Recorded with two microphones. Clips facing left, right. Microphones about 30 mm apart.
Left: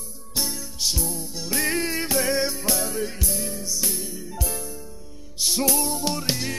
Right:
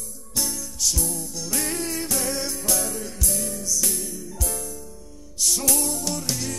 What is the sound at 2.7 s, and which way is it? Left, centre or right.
Music, centre.